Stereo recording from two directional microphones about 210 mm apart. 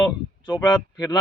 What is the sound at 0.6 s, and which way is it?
Speech, 20° left (ahead or behind).